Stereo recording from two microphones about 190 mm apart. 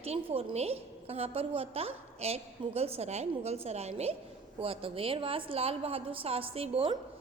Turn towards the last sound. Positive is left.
turn(degrees=-30)  # may be behind; listen again after turning